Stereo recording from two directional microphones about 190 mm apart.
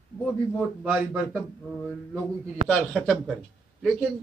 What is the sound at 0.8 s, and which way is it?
Speech, 5° right (ahead or behind).